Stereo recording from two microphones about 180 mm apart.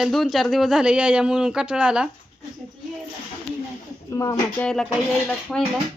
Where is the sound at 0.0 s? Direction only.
Centre (ahead or behind).